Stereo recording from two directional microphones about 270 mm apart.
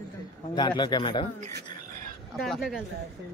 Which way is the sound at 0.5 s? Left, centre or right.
Centre.